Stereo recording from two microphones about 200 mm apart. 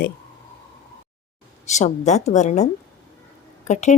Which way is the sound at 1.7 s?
35° left (ahead or behind).